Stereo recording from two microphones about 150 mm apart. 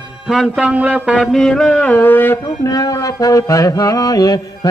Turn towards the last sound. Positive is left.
turn(degrees=25)  # may be behind; listen again after turning